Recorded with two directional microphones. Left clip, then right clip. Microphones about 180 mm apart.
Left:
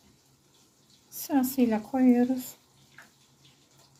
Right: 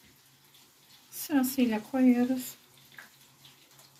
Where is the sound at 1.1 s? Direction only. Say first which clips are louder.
Left 1 dB; 50° left (ahead or behind).